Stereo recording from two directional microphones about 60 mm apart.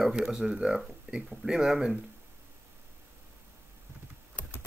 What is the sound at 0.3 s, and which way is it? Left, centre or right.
Speech, centre.